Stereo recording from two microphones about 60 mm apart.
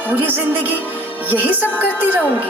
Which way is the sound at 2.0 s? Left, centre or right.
Right.